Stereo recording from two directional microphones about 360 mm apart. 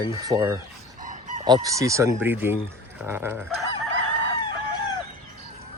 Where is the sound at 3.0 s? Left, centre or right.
Centre.